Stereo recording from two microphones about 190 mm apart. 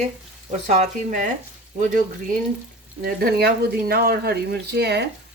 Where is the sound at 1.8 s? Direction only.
45° right (ahead or behind).